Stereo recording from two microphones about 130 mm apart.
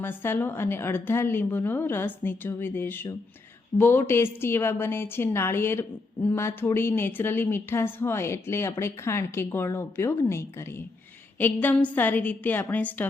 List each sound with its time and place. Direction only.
0.0 s a woman's voice: 15° left (ahead or behind)